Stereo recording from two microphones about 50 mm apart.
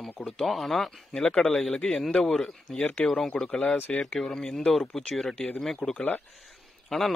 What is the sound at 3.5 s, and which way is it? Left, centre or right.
Speech, left.